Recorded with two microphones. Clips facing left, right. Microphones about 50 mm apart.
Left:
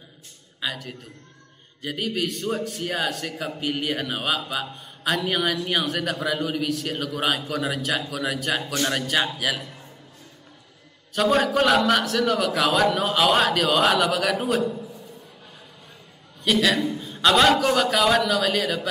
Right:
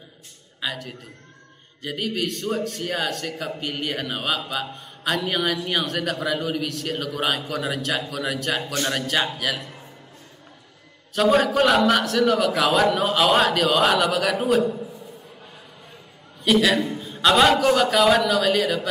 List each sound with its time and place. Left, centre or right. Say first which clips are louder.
0.6 s a man's voice: right 1 dB; centre
11.1 s a man's voice: right 2 dB; centre
14.7 s a sound: right 3 dB; right
16.4 s a man's voice: right 2 dB; centre